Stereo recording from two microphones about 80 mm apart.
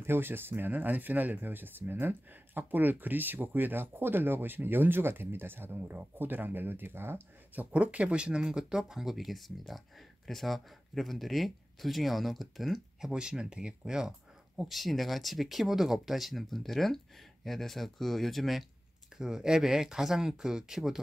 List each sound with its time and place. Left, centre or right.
0.0 s speech: right
7.7 s speech: centre
13.1 s speech: centre